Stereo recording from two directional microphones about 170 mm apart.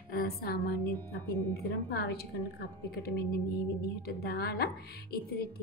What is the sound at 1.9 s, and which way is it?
A woman's voice, 70° left (ahead or behind).